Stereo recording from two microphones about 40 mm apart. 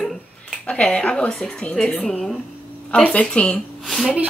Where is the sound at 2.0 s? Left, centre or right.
Centre.